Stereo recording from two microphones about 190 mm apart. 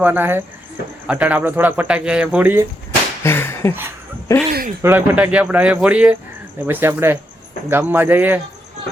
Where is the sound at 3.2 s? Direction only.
10° left (ahead or behind).